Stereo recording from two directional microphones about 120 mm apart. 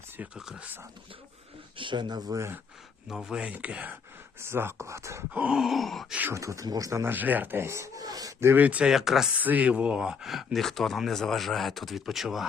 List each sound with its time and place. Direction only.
0.2 s groan: 5° right (ahead or behind)
1.8 s speech: 40° right (ahead or behind)
3.1 s speech: 5° right (ahead or behind); by 5.4 s 25° right (ahead or behind)
5.4 s groan: 5° right (ahead or behind)
6.1 s speech: 15° right (ahead or behind)
6.4 s speech: 25° right (ahead or behind); by 12.5 s centre (ahead or behind)